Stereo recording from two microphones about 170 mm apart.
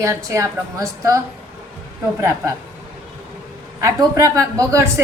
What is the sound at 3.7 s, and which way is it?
A woman's voice, 15° right (ahead or behind).